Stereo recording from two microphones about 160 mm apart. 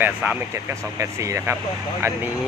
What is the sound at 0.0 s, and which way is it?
Speech, 10° right (ahead or behind).